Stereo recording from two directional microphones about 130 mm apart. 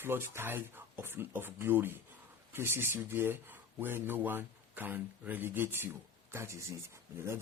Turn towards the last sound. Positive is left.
turn(degrees=-20)  # may be behind; listen again after turning